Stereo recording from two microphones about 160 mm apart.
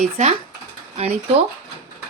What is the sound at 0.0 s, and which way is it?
A woman's voice, 45° right (ahead or behind).